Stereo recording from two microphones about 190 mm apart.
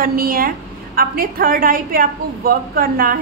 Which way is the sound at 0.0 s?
50° right (ahead or behind).